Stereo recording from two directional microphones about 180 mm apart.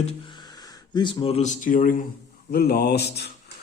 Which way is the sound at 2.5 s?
65° left (ahead or behind).